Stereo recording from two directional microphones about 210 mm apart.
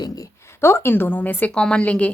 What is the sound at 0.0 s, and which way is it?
A woman's voice, 15° left (ahead or behind).